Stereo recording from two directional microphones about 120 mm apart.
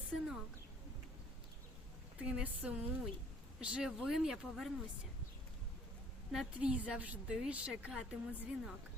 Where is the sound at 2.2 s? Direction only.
10° right (ahead or behind).